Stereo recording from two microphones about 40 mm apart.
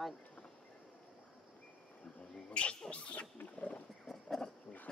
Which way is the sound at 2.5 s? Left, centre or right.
Left.